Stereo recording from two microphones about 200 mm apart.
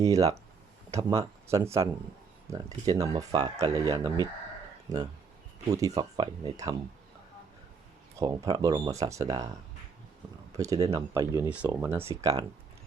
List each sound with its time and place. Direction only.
0.0 s speech: 15° right (ahead or behind)
5.6 s speech: 15° right (ahead or behind)
8.2 s speech: 15° right (ahead or behind)
10.6 s speech: 15° right (ahead or behind)